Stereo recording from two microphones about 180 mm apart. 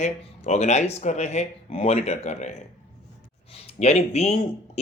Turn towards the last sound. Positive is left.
turn(degrees=35)  # may be behind; listen again after turning